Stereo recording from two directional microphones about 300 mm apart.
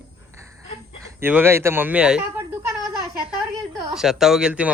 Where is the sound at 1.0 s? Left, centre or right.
Centre.